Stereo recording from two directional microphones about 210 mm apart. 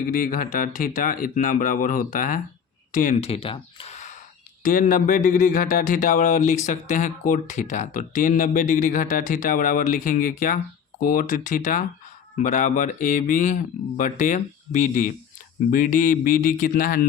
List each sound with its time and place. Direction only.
0.1 s speech: 40° left (ahead or behind)